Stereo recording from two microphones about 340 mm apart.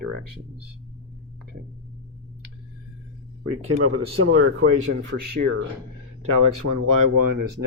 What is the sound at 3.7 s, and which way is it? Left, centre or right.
Speech, right.